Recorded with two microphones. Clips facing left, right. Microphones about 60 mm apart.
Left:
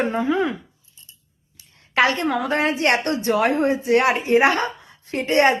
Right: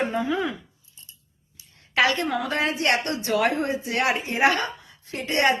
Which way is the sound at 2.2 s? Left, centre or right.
Left.